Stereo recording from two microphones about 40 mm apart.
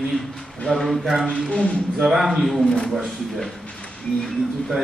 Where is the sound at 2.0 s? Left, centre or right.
Centre.